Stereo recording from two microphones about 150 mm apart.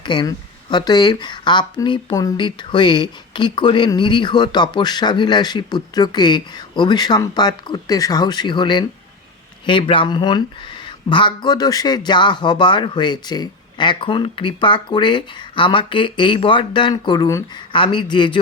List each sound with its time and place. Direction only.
0.0 s speech: 30° left (ahead or behind)